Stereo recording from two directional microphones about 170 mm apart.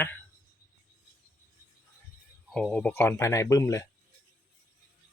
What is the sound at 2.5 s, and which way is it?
Speech, centre (ahead or behind).